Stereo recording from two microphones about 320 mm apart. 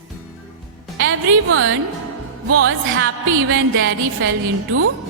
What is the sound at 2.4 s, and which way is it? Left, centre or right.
Speech, right.